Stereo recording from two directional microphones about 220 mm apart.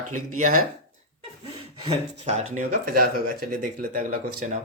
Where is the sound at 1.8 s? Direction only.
30° right (ahead or behind).